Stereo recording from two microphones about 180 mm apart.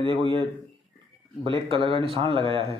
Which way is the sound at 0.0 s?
30° right (ahead or behind).